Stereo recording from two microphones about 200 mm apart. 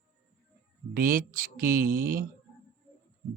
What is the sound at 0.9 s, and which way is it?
Speech, 45° right (ahead or behind).